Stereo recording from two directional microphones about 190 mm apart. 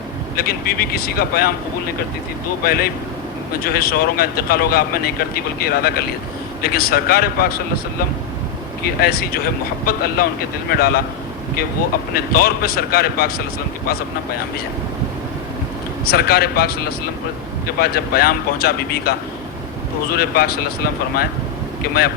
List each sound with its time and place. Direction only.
0.3 s speech: 55° left (ahead or behind)
2.6 s speech: 55° left (ahead or behind)
8.8 s speech: 55° left (ahead or behind)
12.1 s speech: 50° left (ahead or behind)
16.0 s speech: 55° left (ahead or behind)
17.7 s speech: 55° left (ahead or behind)
20.1 s speech: 55° left (ahead or behind)